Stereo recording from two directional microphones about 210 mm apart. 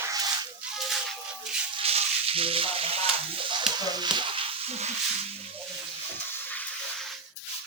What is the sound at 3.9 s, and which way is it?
Speech, 20° right (ahead or behind).